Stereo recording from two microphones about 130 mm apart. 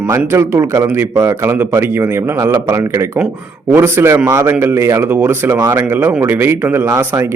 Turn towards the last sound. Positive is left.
turn(degrees=-20)  # may be behind; listen again after turning